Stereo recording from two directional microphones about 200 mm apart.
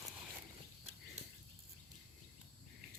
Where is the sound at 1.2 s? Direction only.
30° right (ahead or behind).